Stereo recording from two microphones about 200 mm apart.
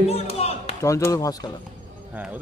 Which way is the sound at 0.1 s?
30° left (ahead or behind).